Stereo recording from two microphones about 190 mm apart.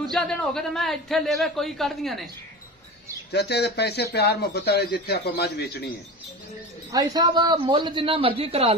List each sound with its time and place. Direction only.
0.0 s a man's voice: 5° left (ahead or behind)
3.3 s speech: 60° left (ahead or behind)
6.9 s a man's voice: 20° right (ahead or behind)